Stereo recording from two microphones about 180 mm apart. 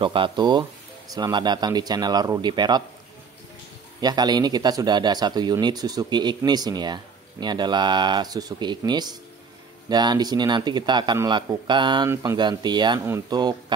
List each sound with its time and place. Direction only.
0.0 s speech: 30° right (ahead or behind)
4.0 s speech: 20° right (ahead or behind)